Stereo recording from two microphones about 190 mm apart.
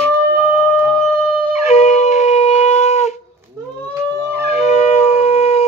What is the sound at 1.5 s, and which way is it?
Wind instrument, 35° left (ahead or behind).